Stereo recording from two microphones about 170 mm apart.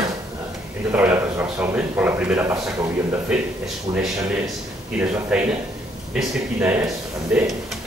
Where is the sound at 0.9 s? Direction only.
10° right (ahead or behind).